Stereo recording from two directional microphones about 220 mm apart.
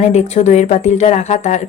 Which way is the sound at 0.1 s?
30° left (ahead or behind).